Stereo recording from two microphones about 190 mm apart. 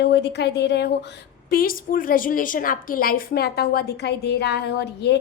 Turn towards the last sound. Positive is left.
turn(degrees=60)  # may be behind; listen again after turning